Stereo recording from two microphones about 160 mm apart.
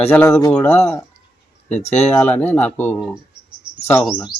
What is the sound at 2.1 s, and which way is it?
Speech, 10° left (ahead or behind).